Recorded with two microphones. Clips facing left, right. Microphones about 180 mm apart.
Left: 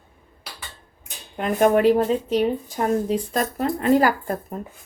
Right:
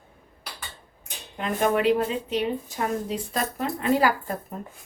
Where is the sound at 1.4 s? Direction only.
45° left (ahead or behind).